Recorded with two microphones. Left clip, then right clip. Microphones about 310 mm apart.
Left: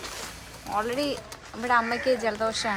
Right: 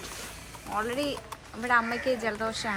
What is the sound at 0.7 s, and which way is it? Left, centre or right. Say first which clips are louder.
A woman's voice: left 3 dB; centre.